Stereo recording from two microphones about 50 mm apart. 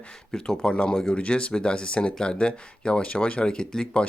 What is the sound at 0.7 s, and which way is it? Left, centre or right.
Speech, left.